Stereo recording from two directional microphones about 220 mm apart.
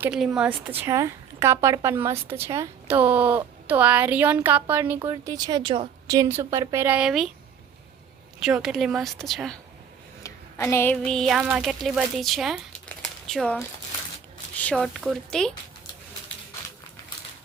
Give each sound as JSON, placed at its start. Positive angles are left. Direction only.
{"t": 0.0, "sound": "a woman's voice", "side_deg": -5}
{"t": 8.4, "sound": "a woman's voice", "side_deg": 0}
{"t": 10.2, "sound": "a woman's voice", "side_deg": 10}